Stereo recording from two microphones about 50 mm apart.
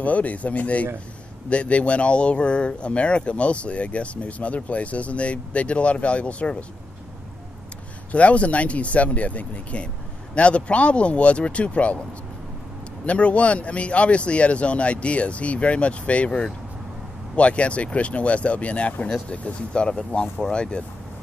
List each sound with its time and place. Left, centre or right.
0.0 s speech: left
8.1 s speech: left
13.0 s speech: left
19.0 s speech: centre